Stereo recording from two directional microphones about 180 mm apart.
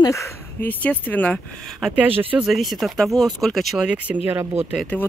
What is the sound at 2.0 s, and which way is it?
Speech, 5° right (ahead or behind).